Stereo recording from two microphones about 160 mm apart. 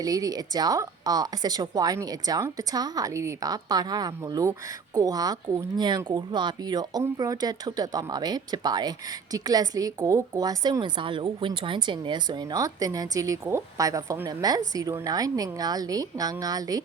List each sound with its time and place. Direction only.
0.0 s speech: 20° right (ahead or behind)